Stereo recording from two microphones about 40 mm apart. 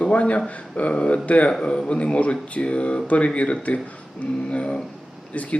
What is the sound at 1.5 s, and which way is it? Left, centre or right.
Speech, centre.